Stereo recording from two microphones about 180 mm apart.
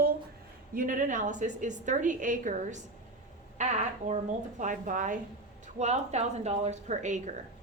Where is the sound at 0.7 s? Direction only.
50° right (ahead or behind).